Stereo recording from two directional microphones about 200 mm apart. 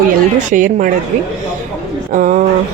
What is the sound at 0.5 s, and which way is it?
A woman's voice, 40° right (ahead or behind).